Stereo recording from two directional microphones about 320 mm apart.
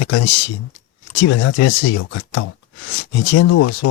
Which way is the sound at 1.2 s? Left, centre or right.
Left.